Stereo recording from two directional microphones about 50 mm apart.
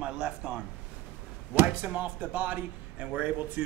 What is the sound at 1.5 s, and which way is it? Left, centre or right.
Speech, right.